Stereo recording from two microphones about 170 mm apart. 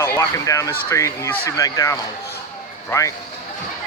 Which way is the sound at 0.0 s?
20° left (ahead or behind).